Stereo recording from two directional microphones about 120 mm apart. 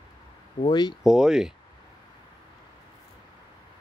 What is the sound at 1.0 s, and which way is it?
Speech, 5° right (ahead or behind).